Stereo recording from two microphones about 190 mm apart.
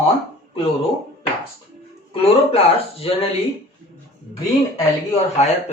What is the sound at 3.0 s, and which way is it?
Speech, 30° left (ahead or behind).